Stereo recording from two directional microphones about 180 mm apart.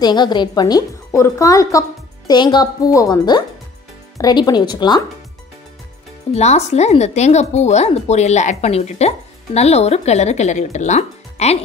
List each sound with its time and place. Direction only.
0.0 s a woman's voice: 25° left (ahead or behind)
6.3 s speech: 35° left (ahead or behind)